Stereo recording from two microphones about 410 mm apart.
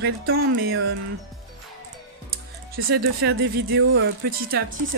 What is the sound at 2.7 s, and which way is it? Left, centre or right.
Speech, right.